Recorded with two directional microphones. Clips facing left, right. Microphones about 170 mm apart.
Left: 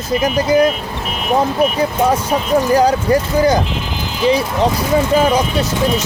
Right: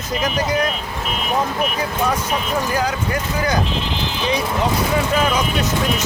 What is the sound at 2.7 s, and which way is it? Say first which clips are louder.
Speech: left 9 dB; 35° left (ahead or behind).